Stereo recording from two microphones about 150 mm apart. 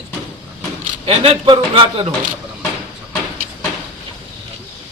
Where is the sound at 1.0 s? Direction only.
40° right (ahead or behind).